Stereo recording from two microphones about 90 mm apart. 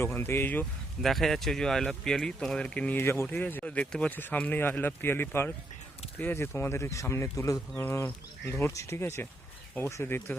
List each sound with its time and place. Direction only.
0.0 s speech: 25° left (ahead or behind)
1.0 s speech: 5° left (ahead or behind); by 7.6 s 35° left (ahead or behind)
7.8 s speech: 20° left (ahead or behind)